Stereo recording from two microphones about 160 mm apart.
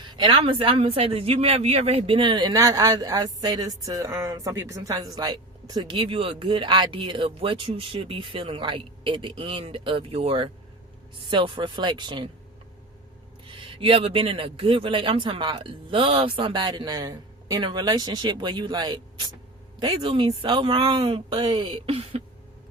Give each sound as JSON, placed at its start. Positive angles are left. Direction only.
{"t": 0.1, "sound": "speech", "side_deg": -30}
{"t": 13.6, "sound": "speech", "side_deg": -35}